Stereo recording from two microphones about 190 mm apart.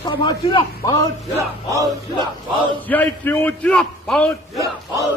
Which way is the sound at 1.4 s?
15° right (ahead or behind).